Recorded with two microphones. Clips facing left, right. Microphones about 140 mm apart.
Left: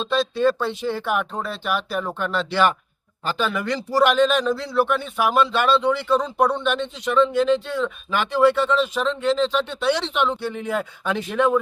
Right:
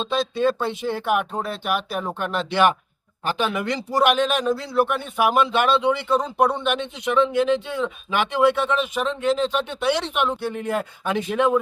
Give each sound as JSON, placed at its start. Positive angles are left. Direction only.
{"t": 0.9, "sound": "speech", "side_deg": -15}